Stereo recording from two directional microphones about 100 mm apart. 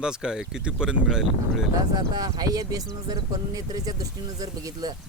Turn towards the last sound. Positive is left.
turn(degrees=-40)  # may be behind; listen again after turning